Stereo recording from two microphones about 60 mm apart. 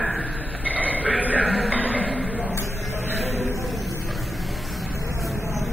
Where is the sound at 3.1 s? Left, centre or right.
Centre.